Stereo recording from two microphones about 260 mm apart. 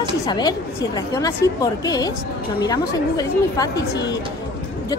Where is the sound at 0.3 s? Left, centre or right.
Centre.